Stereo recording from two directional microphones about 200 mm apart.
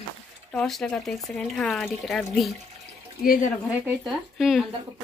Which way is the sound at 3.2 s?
45° left (ahead or behind).